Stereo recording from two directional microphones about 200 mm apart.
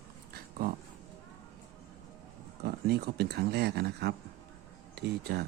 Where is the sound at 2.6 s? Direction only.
50° right (ahead or behind).